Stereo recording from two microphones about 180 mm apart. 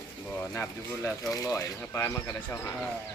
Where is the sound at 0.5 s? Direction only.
15° left (ahead or behind).